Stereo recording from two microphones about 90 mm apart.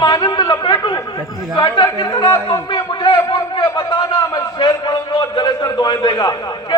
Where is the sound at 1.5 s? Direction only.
60° left (ahead or behind).